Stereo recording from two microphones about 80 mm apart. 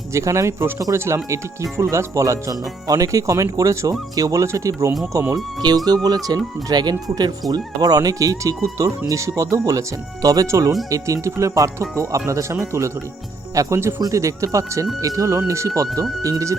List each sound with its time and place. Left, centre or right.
0.1 s speech: right
5.6 s speech: right